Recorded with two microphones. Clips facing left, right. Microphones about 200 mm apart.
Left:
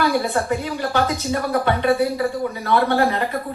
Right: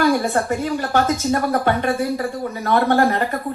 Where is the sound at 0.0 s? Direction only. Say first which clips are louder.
Right 2 dB; 50° right (ahead or behind).